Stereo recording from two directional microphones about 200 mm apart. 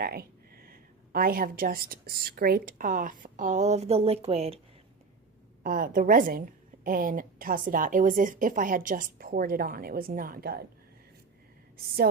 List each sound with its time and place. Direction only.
0.0 s speech: 50° right (ahead or behind); by 4.6 s 30° right (ahead or behind)
5.6 s a woman's voice: 45° right (ahead or behind)